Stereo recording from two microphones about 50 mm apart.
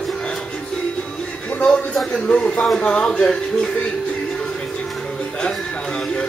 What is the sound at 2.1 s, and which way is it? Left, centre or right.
Speech, left.